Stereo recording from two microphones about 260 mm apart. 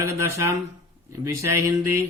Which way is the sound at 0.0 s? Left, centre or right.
Centre.